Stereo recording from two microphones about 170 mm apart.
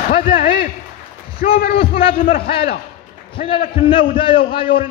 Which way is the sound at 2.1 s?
60° left (ahead or behind).